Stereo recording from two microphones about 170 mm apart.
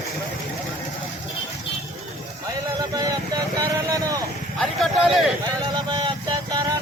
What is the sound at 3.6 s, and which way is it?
Vehicle, 20° right (ahead or behind).